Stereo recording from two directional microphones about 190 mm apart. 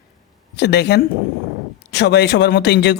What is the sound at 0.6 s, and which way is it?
Speech, 60° left (ahead or behind).